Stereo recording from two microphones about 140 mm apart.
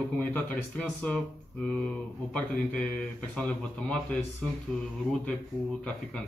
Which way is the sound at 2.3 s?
10° left (ahead or behind).